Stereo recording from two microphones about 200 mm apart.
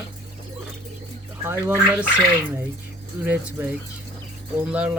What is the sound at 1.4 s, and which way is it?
Speech, 10° right (ahead or behind).